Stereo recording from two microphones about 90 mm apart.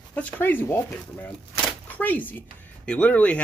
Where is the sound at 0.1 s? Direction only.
20° left (ahead or behind).